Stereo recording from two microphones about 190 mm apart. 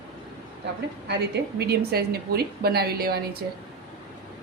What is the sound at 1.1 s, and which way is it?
A woman's voice, 60° right (ahead or behind).